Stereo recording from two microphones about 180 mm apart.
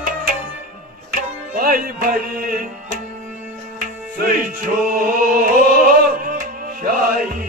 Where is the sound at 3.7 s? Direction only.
50° right (ahead or behind).